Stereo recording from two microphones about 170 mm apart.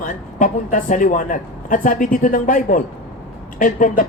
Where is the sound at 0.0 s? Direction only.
50° left (ahead or behind).